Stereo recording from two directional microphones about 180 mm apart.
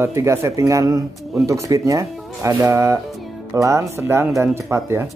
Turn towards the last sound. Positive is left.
turn(degrees=-15)  # may be behind; listen again after turning